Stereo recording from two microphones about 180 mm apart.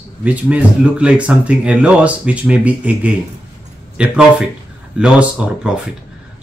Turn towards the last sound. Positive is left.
turn(degrees=-5)  # may be behind; listen again after turning